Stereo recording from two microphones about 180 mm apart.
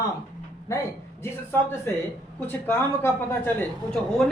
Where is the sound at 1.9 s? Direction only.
10° left (ahead or behind).